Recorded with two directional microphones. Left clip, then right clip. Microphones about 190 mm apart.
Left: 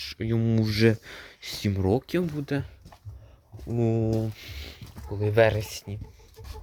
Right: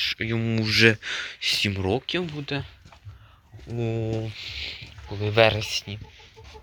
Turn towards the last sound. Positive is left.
turn(degrees=15)  # may be behind; listen again after turning